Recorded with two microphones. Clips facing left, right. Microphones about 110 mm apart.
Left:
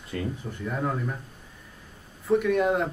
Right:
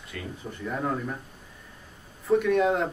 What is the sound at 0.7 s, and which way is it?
Speech, centre (ahead or behind).